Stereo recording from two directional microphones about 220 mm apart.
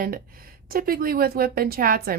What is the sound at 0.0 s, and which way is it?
Speech, 40° right (ahead or behind).